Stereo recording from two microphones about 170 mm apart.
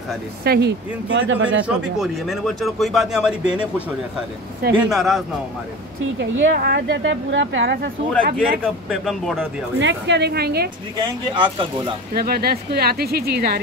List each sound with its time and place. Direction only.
0.4 s speech: 70° right (ahead or behind)
1.1 s speech: 90° right
2.0 s speech: centre (ahead or behind)
4.6 s speech: 65° right (ahead or behind)
4.9 s speech: centre (ahead or behind)
6.1 s speech: 80° right
8.4 s speech: centre (ahead or behind)
9.8 s speech: 90° right; by 10.7 s 70° right (ahead or behind)
11.0 s speech: 30° right (ahead or behind)
12.1 s speech: 65° right (ahead or behind)